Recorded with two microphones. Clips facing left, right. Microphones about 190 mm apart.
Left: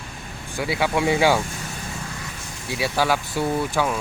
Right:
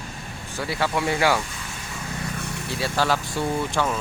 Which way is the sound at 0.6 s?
15° left (ahead or behind).